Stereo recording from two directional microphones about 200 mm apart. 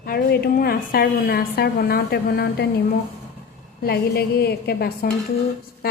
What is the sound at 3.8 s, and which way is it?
A woman's voice, 55° left (ahead or behind).